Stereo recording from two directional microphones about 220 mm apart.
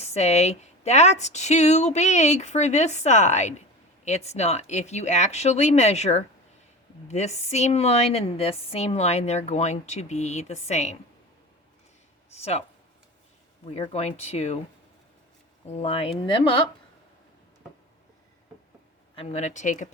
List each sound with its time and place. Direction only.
0.0 s a woman's voice: 30° left (ahead or behind)
12.3 s a woman's voice: 30° left (ahead or behind)
13.7 s a woman's voice: 30° left (ahead or behind)
15.7 s a woman's voice: 25° left (ahead or behind)
19.1 s speech: 25° left (ahead or behind)